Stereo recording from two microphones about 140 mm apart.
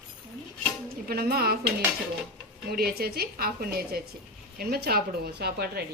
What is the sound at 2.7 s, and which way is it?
A woman's voice, 90° right.